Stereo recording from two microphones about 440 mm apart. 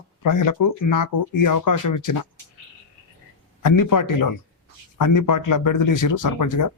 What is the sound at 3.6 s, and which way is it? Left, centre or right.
Speech, left.